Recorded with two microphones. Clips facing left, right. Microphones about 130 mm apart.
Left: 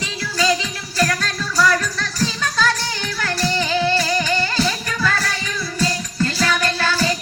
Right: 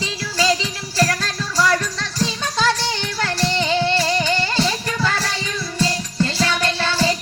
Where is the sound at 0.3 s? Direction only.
30° right (ahead or behind).